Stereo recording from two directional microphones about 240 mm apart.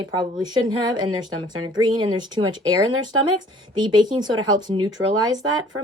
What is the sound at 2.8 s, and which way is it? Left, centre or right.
Speech, right.